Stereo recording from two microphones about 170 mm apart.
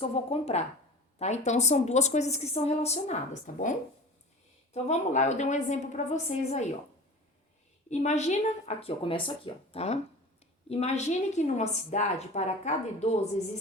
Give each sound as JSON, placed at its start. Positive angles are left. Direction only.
{"t": 0.0, "sound": "a woman's voice", "side_deg": 35}
{"t": 7.9, "sound": "a woman's voice", "side_deg": 40}